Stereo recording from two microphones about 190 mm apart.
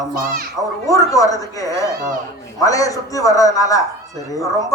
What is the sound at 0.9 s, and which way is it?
Speech, 20° left (ahead or behind).